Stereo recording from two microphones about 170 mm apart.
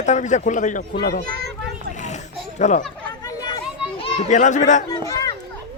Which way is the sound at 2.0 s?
45° left (ahead or behind).